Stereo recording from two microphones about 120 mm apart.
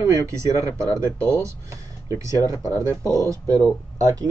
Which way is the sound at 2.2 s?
25° right (ahead or behind).